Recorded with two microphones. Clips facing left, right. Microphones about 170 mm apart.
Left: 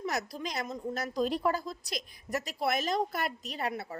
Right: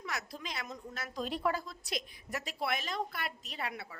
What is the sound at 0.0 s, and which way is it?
A woman's voice, 40° left (ahead or behind).